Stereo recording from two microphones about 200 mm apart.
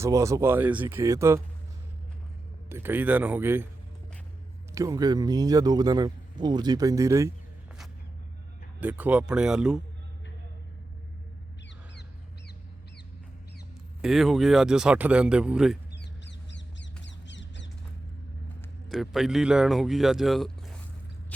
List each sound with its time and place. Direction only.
0.0 s speech: 15° right (ahead or behind)
2.6 s speech: 10° right (ahead or behind)
4.7 s speech: 15° right (ahead or behind)
8.8 s speech: 10° right (ahead or behind)
14.0 s speech: centre (ahead or behind)
16.0 s a sound: 60° left (ahead or behind)
18.9 s speech: centre (ahead or behind)